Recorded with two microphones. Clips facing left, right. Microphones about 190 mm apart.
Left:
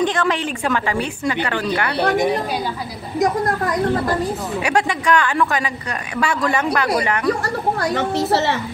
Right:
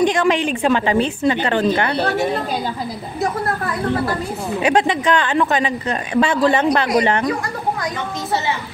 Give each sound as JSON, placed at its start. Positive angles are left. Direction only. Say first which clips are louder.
{"t": 0.0, "sound": "a woman's voice", "louder": "right 3 dB", "side_deg": -15}
{"t": 2.0, "sound": "a woman's voice", "louder": "left 1 dB", "side_deg": 15}
{"t": 4.6, "sound": "a woman's voice", "louder": "right 3 dB", "side_deg": -20}
{"t": 7.9, "sound": "a woman's voice", "louder": "left 5 dB", "side_deg": 75}